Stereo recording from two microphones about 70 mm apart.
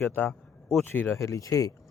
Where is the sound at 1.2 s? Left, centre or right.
Left.